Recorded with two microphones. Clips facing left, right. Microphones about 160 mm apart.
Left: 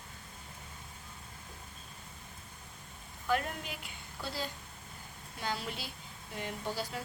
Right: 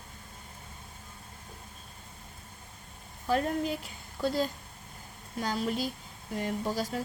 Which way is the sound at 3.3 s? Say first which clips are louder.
Right 6 dB; 35° right (ahead or behind).